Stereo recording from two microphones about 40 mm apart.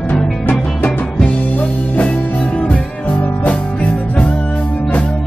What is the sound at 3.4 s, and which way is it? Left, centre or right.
Music, left.